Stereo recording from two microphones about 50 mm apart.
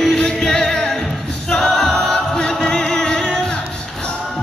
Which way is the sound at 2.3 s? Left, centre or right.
Centre.